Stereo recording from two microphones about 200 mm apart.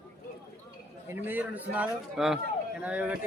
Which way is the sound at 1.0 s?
10° right (ahead or behind).